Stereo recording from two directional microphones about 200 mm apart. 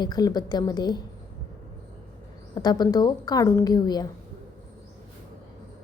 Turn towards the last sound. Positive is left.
turn(degrees=20)  # may be behind; listen again after turning